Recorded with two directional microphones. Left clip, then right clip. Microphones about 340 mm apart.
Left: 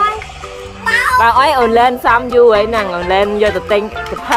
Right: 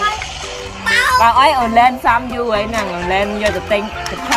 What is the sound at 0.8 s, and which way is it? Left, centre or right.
Music, centre.